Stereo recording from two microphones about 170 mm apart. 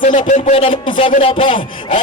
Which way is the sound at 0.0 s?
50° left (ahead or behind).